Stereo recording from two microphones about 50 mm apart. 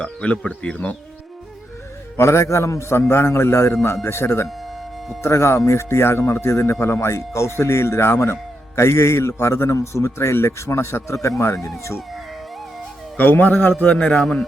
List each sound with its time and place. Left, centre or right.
0.0 s speech: left
2.1 s a man's voice: left
11.1 s speech: left
13.1 s a man's voice: left
13.9 s speech: left